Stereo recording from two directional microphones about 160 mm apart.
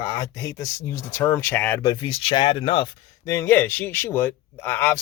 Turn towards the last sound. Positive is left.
turn(degrees=15)  # may be behind; listen again after turning